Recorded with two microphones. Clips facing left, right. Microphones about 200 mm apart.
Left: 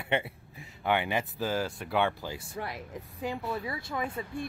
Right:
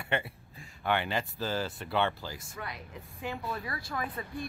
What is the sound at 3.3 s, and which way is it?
Speech, 20° left (ahead or behind).